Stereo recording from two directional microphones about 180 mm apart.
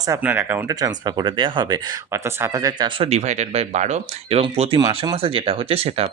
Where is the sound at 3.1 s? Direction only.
40° right (ahead or behind).